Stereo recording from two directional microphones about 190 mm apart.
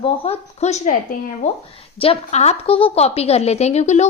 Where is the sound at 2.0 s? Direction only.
35° left (ahead or behind).